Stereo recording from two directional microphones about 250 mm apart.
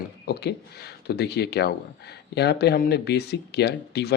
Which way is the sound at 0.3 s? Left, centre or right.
Left.